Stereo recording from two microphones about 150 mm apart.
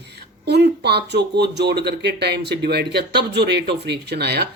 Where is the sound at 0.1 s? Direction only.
90° right.